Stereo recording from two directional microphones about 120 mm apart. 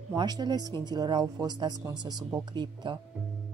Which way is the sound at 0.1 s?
35° right (ahead or behind).